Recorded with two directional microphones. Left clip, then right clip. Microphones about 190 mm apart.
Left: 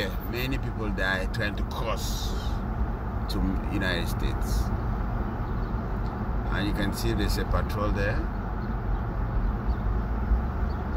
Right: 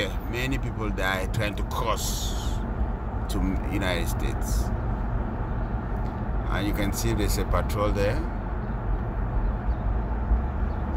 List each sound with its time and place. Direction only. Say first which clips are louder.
0.0 s speech: right 2 dB; 10° right (ahead or behind)
3.7 s speech: right 1 dB; 10° right (ahead or behind)
6.5 s speech: right 2 dB; 10° right (ahead or behind)